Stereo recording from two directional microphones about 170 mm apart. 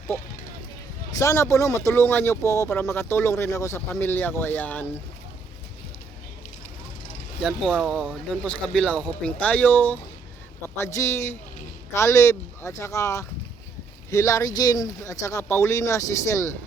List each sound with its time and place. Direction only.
1.1 s speech: 15° left (ahead or behind)
7.4 s speech: centre (ahead or behind); by 16.5 s 15° left (ahead or behind)